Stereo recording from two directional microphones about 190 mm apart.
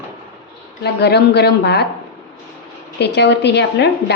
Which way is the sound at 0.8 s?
60° left (ahead or behind).